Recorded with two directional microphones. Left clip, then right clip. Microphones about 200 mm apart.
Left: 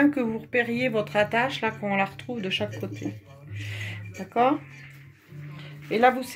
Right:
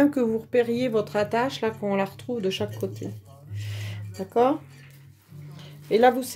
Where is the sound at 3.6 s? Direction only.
60° right (ahead or behind).